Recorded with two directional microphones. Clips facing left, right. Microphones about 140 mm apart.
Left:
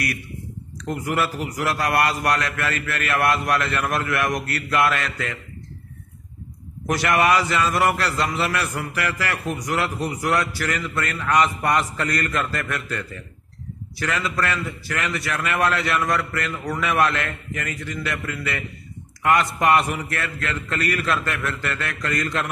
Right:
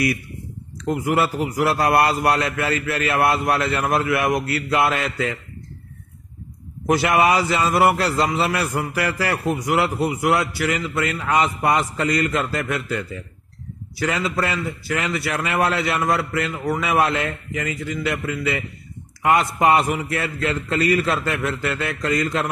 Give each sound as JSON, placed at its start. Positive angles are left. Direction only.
{"t": 0.7, "sound": "a man's voice", "side_deg": -25}
{"t": 6.9, "sound": "a man's voice", "side_deg": -25}